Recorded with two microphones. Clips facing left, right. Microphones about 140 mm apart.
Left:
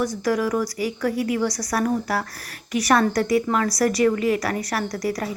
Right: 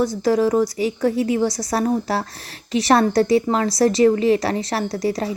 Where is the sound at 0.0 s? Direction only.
25° right (ahead or behind).